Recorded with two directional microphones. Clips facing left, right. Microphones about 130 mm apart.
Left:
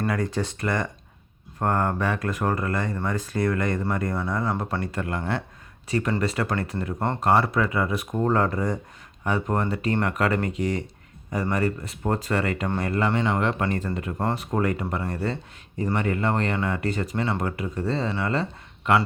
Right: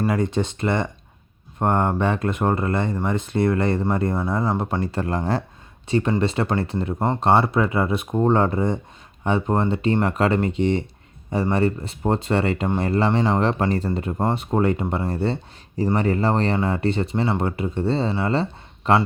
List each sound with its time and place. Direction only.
0.1 s speech: 25° right (ahead or behind)